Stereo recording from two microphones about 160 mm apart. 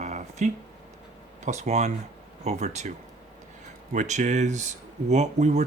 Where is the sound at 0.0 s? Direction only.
45° right (ahead or behind).